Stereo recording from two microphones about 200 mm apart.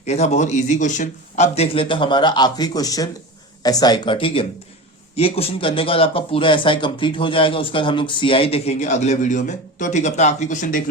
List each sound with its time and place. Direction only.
0.0 s speech: 35° left (ahead or behind)